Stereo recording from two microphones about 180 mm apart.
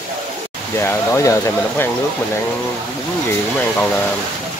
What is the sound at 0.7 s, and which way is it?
Speech, 15° left (ahead or behind).